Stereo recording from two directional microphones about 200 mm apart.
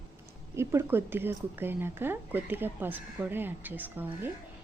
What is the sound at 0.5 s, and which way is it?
Speech, 15° right (ahead or behind).